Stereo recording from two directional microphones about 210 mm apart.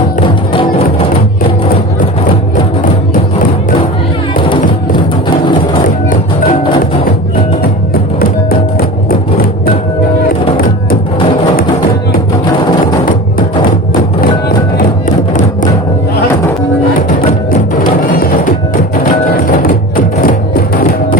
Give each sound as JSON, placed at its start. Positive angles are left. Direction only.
{"t": 19.6, "sound": "music", "side_deg": 45}